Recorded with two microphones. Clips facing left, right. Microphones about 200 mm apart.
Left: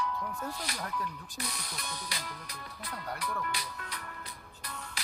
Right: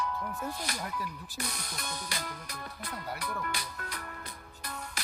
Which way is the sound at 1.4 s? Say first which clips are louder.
Right 2 dB; 45° right (ahead or behind).